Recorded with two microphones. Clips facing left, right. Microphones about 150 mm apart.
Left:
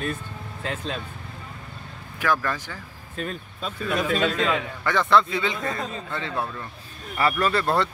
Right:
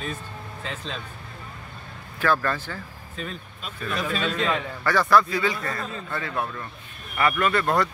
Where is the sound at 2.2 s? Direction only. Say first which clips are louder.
Right 1 dB; 15° left (ahead or behind).